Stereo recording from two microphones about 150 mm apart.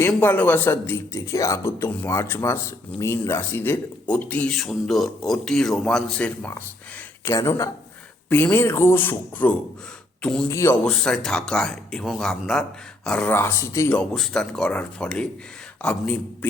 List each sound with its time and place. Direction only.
0.2 s a man's voice: 10° left (ahead or behind)
7.3 s a man's voice: 20° left (ahead or behind)
10.5 s speech: 20° left (ahead or behind)
10.8 s a man's voice: 5° left (ahead or behind)
14.0 s a man's voice: 5° left (ahead or behind)